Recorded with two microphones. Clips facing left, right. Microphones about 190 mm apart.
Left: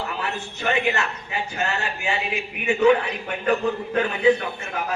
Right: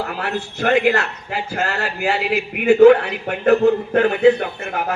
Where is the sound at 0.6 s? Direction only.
85° right.